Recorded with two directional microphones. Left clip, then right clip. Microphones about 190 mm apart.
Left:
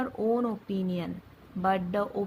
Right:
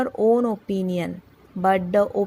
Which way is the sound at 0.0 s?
35° right (ahead or behind).